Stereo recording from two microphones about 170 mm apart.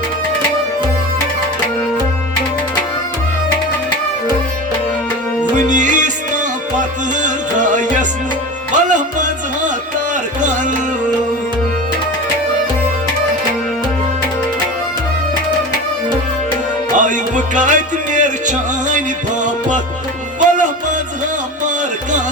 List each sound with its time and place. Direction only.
5.5 s music: 45° right (ahead or behind)
16.9 s music: 50° right (ahead or behind)
20.4 s music: 50° right (ahead or behind)